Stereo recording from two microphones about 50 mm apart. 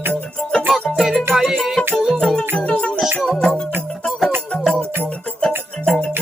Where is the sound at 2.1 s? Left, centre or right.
Centre.